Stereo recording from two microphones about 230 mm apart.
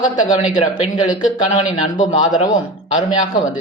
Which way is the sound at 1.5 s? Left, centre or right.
Left.